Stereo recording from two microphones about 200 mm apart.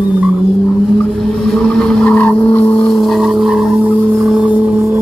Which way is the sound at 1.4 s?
5° left (ahead or behind).